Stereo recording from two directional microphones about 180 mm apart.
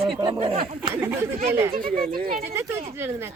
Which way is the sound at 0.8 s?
15° right (ahead or behind).